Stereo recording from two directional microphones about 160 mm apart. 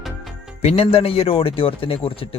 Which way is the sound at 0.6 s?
40° left (ahead or behind).